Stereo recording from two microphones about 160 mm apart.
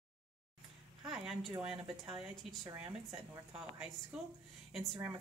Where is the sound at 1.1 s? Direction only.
5° right (ahead or behind).